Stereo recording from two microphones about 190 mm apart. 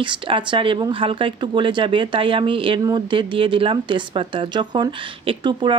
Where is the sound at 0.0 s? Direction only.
25° right (ahead or behind).